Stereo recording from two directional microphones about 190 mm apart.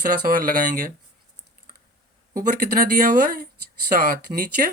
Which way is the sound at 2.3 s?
45° right (ahead or behind).